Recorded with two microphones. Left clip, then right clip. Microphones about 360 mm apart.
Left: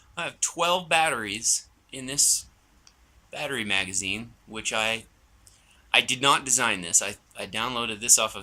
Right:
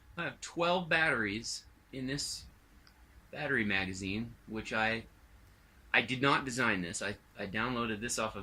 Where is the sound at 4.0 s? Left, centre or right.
Left.